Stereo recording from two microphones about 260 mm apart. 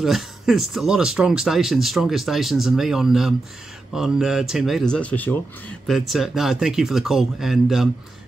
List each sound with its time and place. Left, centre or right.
0.0 s speech: centre